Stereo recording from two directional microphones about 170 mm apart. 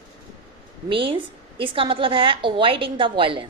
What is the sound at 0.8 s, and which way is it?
A woman's voice, 30° right (ahead or behind).